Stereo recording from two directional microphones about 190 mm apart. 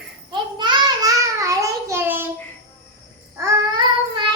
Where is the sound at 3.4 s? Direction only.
20° right (ahead or behind).